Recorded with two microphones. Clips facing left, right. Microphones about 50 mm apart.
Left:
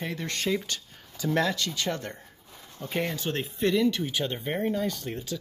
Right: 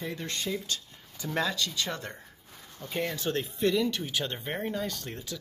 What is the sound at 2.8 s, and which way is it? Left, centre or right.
Speech, left.